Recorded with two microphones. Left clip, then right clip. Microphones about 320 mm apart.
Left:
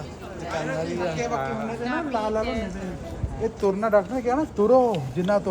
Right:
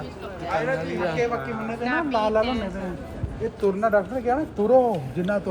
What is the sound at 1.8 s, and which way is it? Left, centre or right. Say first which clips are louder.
Speech: right 5 dB; right.